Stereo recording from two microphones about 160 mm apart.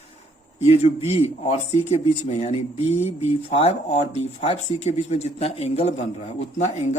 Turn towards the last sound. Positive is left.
turn(degrees=45)  # may be behind; listen again after turning